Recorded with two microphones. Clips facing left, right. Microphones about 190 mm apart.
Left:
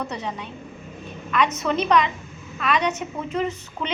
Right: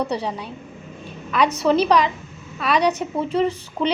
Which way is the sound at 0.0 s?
35° right (ahead or behind).